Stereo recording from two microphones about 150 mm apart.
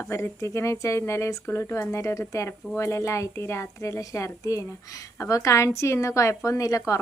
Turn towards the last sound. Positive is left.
turn(degrees=20)  # may be behind; listen again after turning